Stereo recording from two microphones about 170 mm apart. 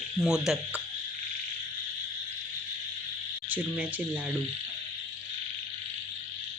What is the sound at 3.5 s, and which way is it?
Speech, 10° right (ahead or behind).